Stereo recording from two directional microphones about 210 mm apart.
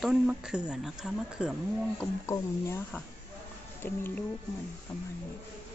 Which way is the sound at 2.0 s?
15° left (ahead or behind).